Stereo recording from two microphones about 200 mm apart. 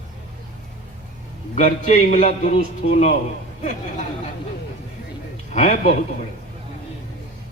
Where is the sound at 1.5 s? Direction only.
35° left (ahead or behind).